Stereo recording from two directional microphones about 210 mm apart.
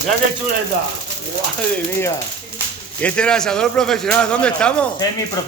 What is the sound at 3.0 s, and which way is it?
A man's voice, 5° left (ahead or behind).